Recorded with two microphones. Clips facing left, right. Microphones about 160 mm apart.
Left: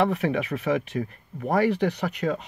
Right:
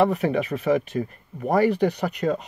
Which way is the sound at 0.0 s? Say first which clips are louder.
Right 3 dB; 35° right (ahead or behind).